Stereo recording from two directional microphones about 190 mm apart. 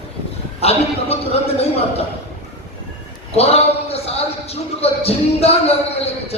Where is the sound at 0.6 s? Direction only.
30° left (ahead or behind).